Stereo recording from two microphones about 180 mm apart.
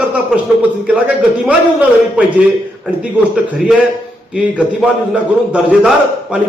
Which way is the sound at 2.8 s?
5° right (ahead or behind).